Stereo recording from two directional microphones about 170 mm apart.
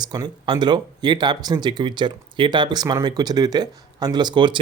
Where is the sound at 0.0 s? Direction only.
25° right (ahead or behind).